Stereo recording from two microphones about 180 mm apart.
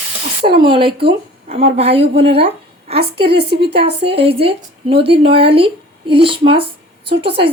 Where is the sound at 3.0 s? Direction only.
65° right (ahead or behind).